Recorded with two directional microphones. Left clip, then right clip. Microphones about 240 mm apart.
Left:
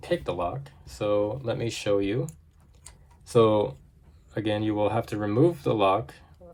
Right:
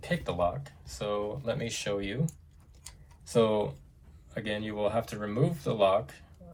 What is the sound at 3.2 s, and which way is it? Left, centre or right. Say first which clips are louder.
Speech: left 5 dB; left.